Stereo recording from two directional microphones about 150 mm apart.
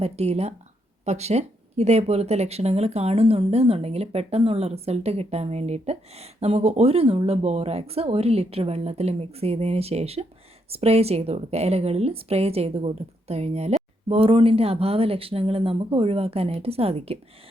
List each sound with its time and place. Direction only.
0.0 s speech: 45° right (ahead or behind)